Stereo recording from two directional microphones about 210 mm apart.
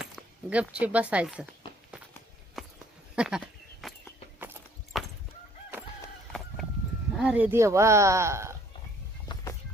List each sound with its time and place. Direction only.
0.0 s speech: 5° right (ahead or behind)
2.6 s a sound: 5° right (ahead or behind)
4.9 s chicken: centre (ahead or behind)
7.1 s speech: 5° right (ahead or behind)
9.3 s music: 15° left (ahead or behind)